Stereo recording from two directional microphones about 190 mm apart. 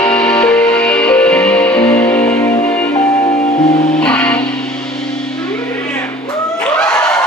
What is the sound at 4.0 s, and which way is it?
Music, 5° left (ahead or behind).